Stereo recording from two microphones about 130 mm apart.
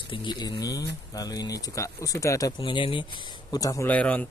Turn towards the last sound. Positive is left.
turn(degrees=10)  # may be behind; listen again after turning